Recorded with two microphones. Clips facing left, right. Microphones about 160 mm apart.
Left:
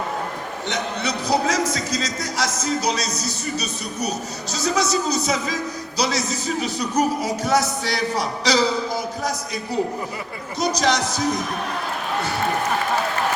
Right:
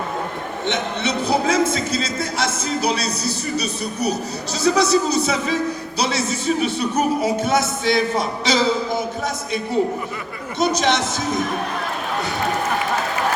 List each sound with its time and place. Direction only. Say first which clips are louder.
0.7 s speech: right 3 dB; 25° right (ahead or behind)
10.6 s speech: right 2 dB; 25° right (ahead or behind)